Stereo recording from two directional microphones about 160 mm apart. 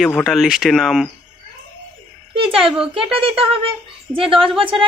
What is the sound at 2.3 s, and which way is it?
Speech, 35° right (ahead or behind).